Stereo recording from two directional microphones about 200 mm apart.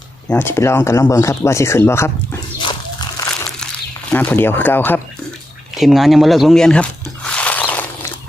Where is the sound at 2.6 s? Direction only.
20° left (ahead or behind).